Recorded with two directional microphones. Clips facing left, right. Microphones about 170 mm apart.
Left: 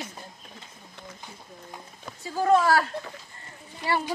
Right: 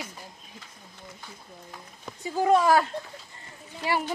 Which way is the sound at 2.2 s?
15° right (ahead or behind).